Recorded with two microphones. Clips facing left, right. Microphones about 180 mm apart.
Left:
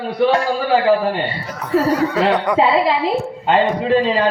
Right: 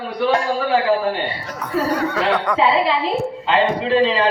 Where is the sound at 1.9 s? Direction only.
10° left (ahead or behind).